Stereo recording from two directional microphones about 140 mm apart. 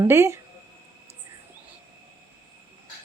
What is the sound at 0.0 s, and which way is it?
Speech, 20° right (ahead or behind).